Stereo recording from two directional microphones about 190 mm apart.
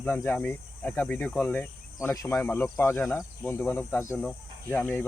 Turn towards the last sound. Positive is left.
turn(degrees=10)  # may be behind; listen again after turning